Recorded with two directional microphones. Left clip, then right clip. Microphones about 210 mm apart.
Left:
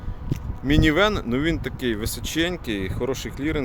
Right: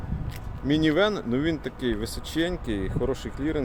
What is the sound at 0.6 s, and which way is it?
Speech, 15° left (ahead or behind).